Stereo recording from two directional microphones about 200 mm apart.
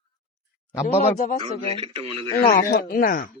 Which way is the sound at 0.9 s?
35° left (ahead or behind).